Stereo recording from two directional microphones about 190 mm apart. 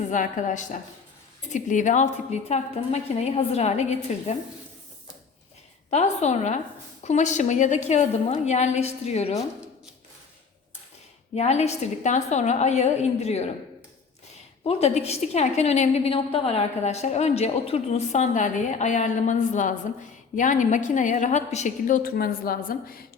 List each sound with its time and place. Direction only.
0.1 s a woman's voice: 40° left (ahead or behind)
5.9 s a woman's voice: 35° left (ahead or behind)
11.3 s a woman's voice: 35° left (ahead or behind)
14.6 s a woman's voice: 35° left (ahead or behind); by 23.0 s 50° left (ahead or behind)